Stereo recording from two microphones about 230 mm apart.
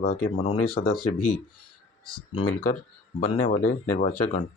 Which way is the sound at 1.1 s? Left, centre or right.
Left.